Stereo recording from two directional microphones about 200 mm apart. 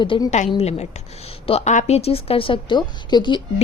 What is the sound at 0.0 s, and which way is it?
A woman's voice, 25° left (ahead or behind).